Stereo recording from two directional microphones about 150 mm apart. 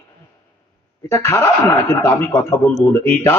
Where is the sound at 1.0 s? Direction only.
15° left (ahead or behind).